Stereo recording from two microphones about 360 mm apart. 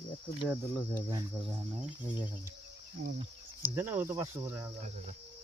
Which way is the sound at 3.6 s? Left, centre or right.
Centre.